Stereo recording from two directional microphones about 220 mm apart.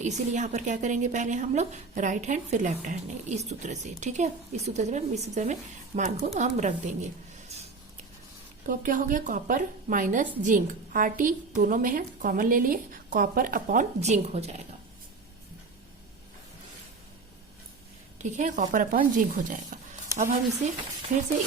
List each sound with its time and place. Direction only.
0.0 s a woman's voice: 35° right (ahead or behind)
8.6 s a woman's voice: 35° right (ahead or behind)
18.2 s a woman's voice: 35° right (ahead or behind)